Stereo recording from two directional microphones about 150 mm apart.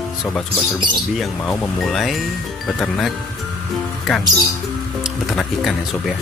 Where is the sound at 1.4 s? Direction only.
10° left (ahead or behind).